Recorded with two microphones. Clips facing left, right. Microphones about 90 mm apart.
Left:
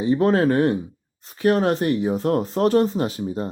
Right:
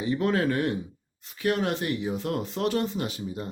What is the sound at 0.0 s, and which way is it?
Speech, 35° left (ahead or behind).